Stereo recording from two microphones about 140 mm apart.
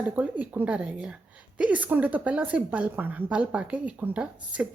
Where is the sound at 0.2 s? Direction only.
10° right (ahead or behind).